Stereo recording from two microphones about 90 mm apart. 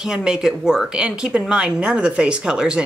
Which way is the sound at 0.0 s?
5° right (ahead or behind).